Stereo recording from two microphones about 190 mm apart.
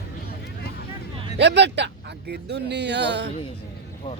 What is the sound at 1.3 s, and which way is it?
Speech, 65° right (ahead or behind).